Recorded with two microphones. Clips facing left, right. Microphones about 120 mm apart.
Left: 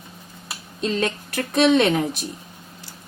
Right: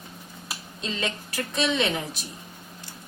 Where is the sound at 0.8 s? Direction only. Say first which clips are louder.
Left 8 dB; 50° left (ahead or behind).